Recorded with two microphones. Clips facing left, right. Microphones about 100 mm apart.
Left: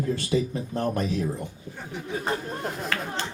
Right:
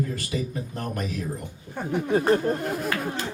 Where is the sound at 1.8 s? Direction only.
55° right (ahead or behind).